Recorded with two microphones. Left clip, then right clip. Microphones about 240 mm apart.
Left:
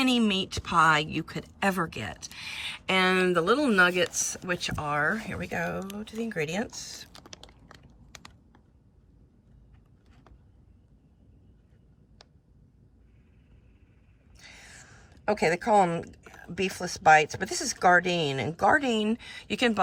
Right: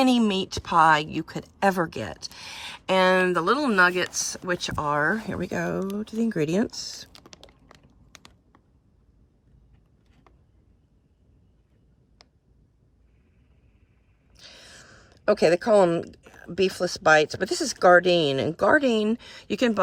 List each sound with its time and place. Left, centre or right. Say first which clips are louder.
0.0 s a woman's voice: right 4 dB; centre
14.3 s a sound: right 2 dB; centre
16.5 s speech: right 7 dB; right
17.0 s a woman's voice: even; centre